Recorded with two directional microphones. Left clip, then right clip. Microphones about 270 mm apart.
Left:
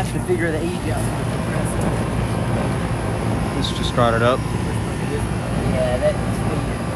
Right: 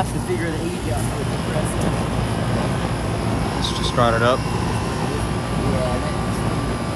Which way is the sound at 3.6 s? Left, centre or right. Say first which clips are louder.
Even; centre.